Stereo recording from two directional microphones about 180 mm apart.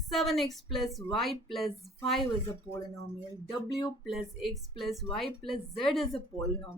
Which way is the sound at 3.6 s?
25° left (ahead or behind).